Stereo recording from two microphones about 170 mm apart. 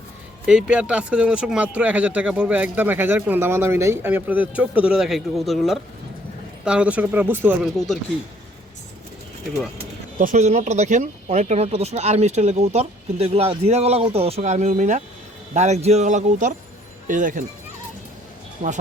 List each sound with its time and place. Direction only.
0.4 s speech: 5° right (ahead or behind)
10.2 s speech: 45° right (ahead or behind)